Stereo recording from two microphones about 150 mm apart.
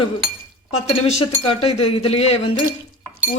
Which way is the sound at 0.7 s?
45° left (ahead or behind).